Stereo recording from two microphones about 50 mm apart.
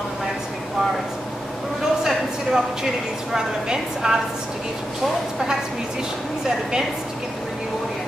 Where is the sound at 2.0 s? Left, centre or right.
Centre.